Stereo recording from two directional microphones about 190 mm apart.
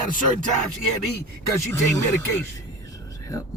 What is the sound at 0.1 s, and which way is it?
Speech, 45° left (ahead or behind).